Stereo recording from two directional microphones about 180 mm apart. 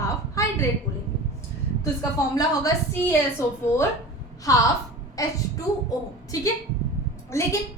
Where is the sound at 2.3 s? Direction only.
15° left (ahead or behind).